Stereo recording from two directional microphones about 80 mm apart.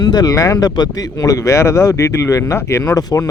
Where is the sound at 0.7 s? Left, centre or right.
Left.